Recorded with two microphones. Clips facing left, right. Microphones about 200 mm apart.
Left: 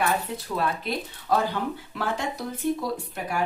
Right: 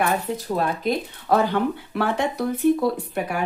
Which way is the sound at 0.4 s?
45° right (ahead or behind).